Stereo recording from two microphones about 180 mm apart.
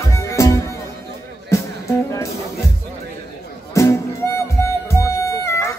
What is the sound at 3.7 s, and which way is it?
Music, 15° left (ahead or behind).